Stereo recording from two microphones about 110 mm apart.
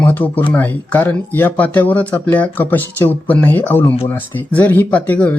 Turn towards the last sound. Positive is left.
turn(degrees=10)  # may be behind; listen again after turning